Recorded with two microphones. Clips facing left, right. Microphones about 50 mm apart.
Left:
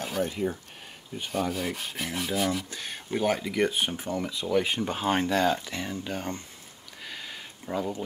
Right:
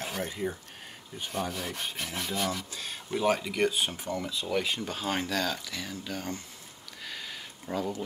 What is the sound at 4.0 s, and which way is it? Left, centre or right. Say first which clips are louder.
Speech: left 2 dB; left.